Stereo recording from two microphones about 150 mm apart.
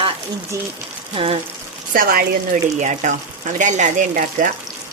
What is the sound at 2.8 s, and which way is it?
Speech, 55° right (ahead or behind).